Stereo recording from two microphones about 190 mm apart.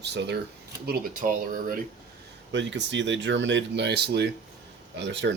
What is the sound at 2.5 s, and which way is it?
Speech, 70° right (ahead or behind).